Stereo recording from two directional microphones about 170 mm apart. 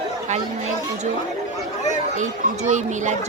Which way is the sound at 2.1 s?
45° right (ahead or behind).